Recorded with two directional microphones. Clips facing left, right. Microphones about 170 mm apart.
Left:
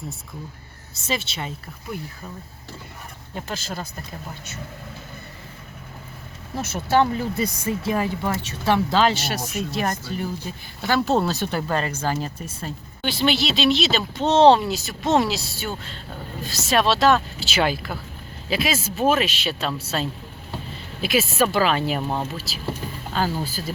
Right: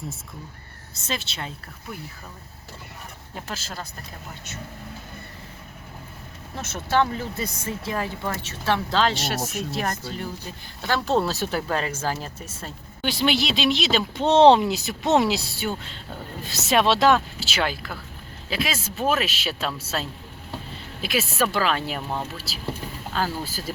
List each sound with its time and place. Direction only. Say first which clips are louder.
1.0 s speech: left 4 dB; 5° left (ahead or behind)
3.3 s speech: left 4 dB; centre (ahead or behind)
6.6 s speech: left 3 dB; 10° left (ahead or behind)
13.1 s speech: left 1 dB; 15° right (ahead or behind)
17.4 s speech: left 4 dB; 5° left (ahead or behind)